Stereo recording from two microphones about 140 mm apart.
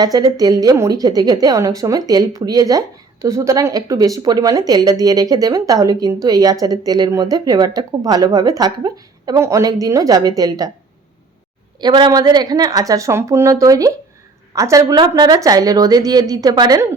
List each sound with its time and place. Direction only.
0.0 s a woman's voice: 25° right (ahead or behind)
11.8 s a woman's voice: 35° right (ahead or behind)